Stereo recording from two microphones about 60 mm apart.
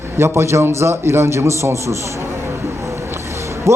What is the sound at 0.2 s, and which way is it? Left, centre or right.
A man's voice, right.